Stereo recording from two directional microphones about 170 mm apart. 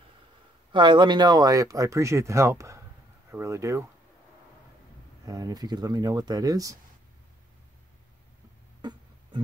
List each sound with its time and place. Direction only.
0.7 s speech: 30° right (ahead or behind)
5.2 s speech: 20° right (ahead or behind)
8.8 s a sound: 25° right (ahead or behind)